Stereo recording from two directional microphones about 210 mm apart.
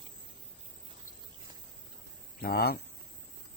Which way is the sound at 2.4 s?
45° left (ahead or behind).